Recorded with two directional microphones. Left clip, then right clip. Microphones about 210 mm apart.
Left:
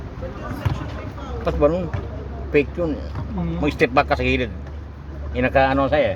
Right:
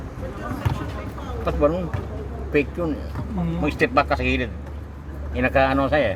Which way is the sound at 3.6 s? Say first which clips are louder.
Left 2 dB; 35° left (ahead or behind).